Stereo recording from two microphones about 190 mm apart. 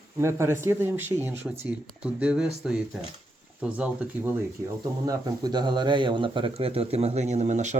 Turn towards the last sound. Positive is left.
turn(degrees=-40)  # may be behind; listen again after turning